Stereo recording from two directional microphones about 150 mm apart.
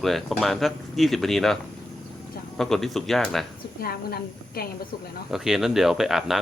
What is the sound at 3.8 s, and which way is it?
Speech, 90° left.